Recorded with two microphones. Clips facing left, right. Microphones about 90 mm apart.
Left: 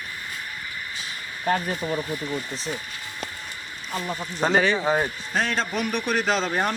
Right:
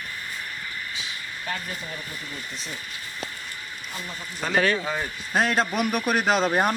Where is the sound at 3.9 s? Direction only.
40° left (ahead or behind).